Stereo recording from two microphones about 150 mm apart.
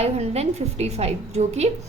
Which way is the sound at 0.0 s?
45° right (ahead or behind).